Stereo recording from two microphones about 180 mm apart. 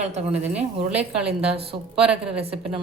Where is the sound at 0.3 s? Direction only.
10° right (ahead or behind).